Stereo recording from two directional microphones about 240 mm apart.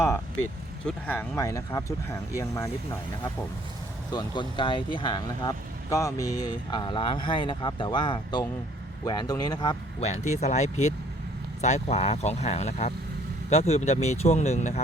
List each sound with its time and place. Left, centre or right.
0.9 s speech: centre
10.4 s speech: left